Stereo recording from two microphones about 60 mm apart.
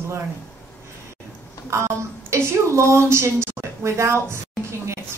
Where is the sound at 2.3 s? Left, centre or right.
Right.